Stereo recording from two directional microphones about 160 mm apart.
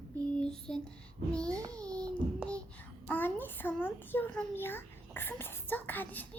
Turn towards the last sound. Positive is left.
turn(degrees=10)  # may be behind; listen again after turning